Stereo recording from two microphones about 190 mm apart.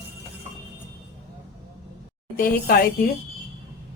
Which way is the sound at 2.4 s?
50° left (ahead or behind).